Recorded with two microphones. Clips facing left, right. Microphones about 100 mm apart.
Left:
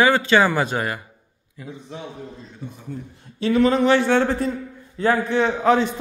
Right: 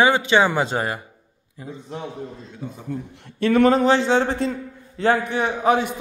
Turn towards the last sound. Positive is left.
turn(degrees=-10)  # may be behind; listen again after turning